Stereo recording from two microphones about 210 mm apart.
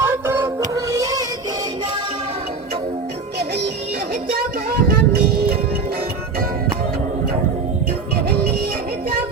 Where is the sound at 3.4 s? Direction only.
50° right (ahead or behind).